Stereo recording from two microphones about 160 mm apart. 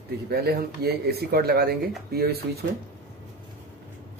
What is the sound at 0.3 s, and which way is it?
Speech, 80° right.